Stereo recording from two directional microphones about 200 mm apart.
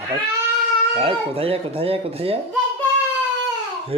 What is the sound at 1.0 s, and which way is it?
Speech, 30° right (ahead or behind).